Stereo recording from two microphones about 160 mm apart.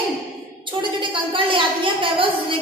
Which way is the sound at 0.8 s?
30° right (ahead or behind).